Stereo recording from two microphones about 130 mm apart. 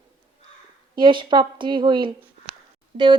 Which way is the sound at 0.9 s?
40° right (ahead or behind).